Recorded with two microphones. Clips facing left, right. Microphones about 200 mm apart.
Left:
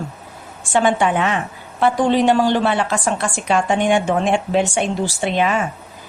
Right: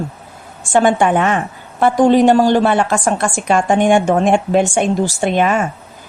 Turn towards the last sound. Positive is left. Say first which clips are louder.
# right 4 dB
turn(degrees=-50)  # may be behind; listen again after turning